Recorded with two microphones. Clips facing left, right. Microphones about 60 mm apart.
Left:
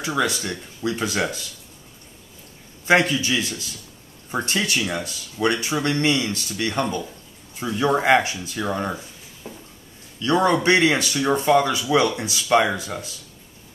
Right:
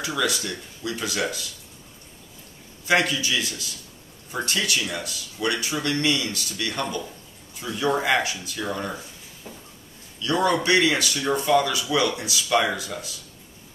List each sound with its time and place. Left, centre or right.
0.0 s speech: left
2.8 s speech: left
9.5 s a sound: centre
10.1 s speech: left